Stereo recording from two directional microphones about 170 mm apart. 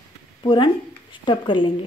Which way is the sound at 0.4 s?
30° left (ahead or behind).